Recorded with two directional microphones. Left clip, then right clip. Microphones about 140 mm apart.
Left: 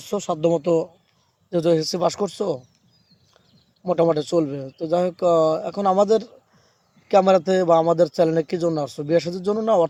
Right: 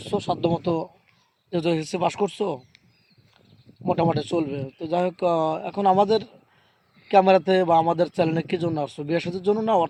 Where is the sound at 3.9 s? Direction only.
55° left (ahead or behind).